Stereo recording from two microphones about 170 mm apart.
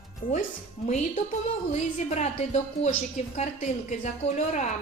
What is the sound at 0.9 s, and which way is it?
A woman's voice, 40° left (ahead or behind).